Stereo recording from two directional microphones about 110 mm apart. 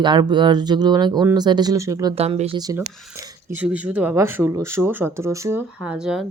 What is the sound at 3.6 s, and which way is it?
Speech, 15° right (ahead or behind).